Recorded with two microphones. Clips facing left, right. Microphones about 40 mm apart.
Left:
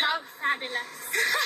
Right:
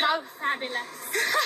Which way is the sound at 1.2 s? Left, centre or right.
Right.